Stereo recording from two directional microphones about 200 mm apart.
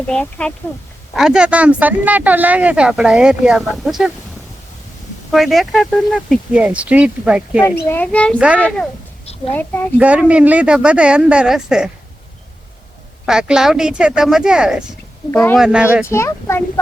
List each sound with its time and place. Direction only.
0.1 s speech: 5° left (ahead or behind)
5.3 s speech: centre (ahead or behind)
7.9 s speech: 10° left (ahead or behind)
8.4 s a child's voice: 5° right (ahead or behind)
10.0 s speech: 5° right (ahead or behind)
13.2 s speech: 5° right (ahead or behind)
15.3 s speech: 10° left (ahead or behind)
15.6 s speech: 5° right (ahead or behind)
16.0 s speech: 15° left (ahead or behind)